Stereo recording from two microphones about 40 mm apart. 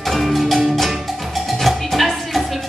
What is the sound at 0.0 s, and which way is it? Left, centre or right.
Music, centre.